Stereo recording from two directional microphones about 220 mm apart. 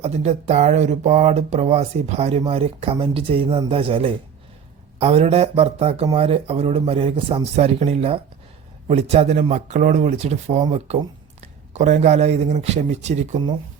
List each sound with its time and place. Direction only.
0.0 s speech: 30° right (ahead or behind)